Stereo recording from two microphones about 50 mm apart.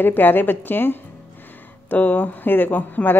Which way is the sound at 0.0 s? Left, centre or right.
Left.